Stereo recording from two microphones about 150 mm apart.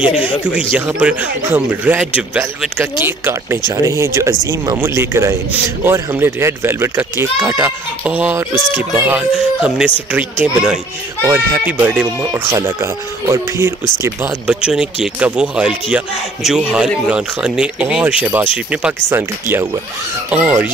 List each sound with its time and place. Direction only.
0.7 s a man's voice: 10° right (ahead or behind)
14.5 s a man's voice: 5° right (ahead or behind)